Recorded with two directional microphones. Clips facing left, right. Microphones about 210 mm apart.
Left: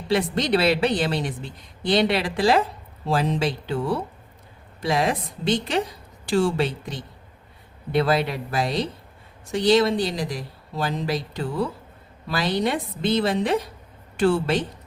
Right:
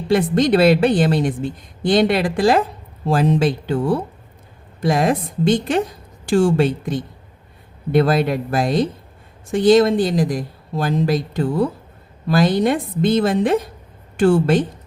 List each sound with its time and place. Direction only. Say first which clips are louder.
0.1 s a woman's voice: right 6 dB; 50° right (ahead or behind)